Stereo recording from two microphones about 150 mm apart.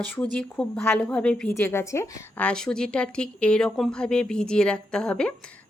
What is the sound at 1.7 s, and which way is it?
Speech, 20° left (ahead or behind).